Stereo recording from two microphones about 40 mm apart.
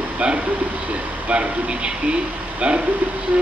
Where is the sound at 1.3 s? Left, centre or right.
Right.